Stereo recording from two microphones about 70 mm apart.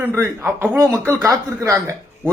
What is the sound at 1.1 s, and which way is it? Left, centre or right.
Speech, right.